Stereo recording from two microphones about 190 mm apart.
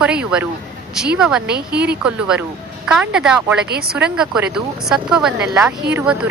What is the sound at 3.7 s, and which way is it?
Speech, 55° right (ahead or behind).